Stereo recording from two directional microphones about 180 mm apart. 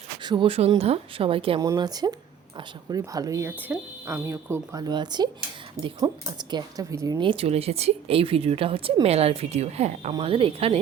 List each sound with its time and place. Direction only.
0.2 s speech: 25° right (ahead or behind)